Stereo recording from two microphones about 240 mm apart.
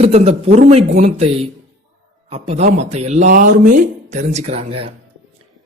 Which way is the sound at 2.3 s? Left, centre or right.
Right.